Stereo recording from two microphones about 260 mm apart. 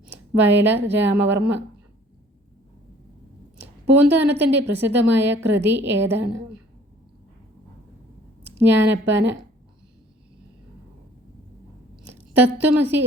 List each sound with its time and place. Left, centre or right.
0.1 s speech: right
3.9 s a woman's voice: centre
4.4 s speech: right
8.4 s speech: right
12.3 s a woman's voice: centre